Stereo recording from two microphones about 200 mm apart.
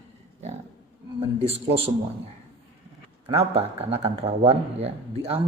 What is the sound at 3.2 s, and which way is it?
Speech, 30° right (ahead or behind).